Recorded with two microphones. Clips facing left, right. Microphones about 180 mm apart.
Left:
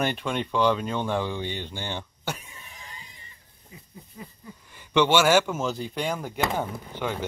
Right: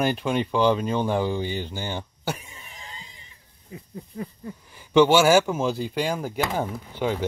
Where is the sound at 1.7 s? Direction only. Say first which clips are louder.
Right 3 dB; 5° right (ahead or behind).